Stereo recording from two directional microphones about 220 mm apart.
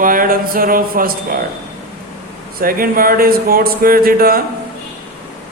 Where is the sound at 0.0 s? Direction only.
40° right (ahead or behind).